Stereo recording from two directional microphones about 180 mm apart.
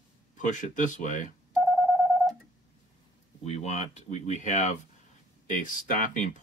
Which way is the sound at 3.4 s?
35° left (ahead or behind).